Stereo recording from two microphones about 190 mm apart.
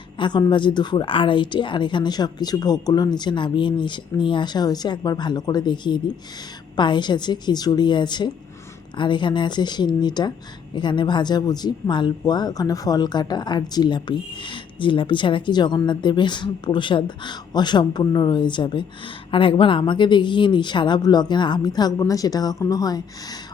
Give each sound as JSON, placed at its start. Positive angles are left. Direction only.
{"t": 0.2, "sound": "speech", "side_deg": 25}